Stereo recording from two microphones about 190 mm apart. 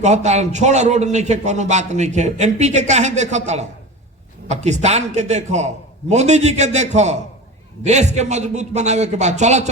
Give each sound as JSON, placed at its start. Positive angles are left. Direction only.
{"t": 0.0, "sound": "a man's voice", "side_deg": -35}